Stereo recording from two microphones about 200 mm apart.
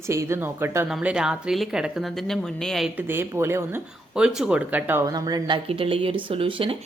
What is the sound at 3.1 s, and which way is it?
A woman's voice, 10° right (ahead or behind).